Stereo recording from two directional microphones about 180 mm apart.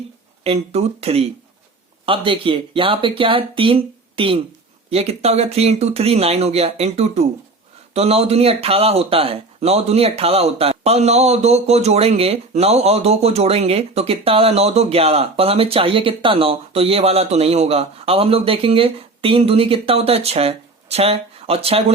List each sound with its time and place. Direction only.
0.4 s speech: 35° right (ahead or behind)